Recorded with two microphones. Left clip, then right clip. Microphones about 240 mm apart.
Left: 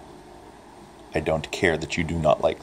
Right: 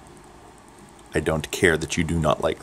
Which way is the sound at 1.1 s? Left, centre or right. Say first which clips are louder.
Even; right.